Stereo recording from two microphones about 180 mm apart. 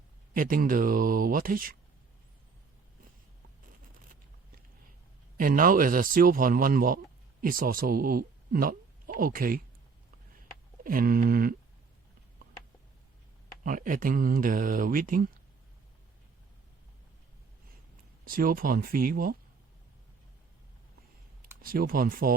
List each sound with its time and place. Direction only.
0.3 s speech: 50° right (ahead or behind)
5.4 s a man's voice: 50° right (ahead or behind)
10.8 s speech: 50° right (ahead or behind)
13.7 s speech: 50° right (ahead or behind)
18.3 s speech: 50° right (ahead or behind)
21.6 s speech: 50° right (ahead or behind)